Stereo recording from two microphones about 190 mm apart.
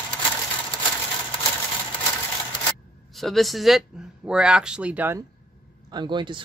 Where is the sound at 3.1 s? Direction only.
Centre (ahead or behind).